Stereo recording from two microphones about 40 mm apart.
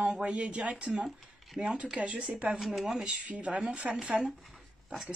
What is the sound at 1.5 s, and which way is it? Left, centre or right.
Speech, right.